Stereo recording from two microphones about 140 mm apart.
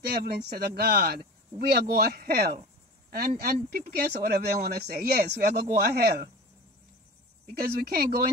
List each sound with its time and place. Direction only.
0.2 s speech: 90° right
7.5 s speech: 90° right